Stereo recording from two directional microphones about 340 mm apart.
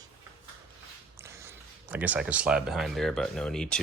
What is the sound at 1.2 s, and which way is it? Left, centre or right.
Speech, centre.